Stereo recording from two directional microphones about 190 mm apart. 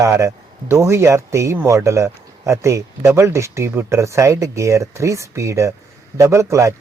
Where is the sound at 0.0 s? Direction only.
15° right (ahead or behind).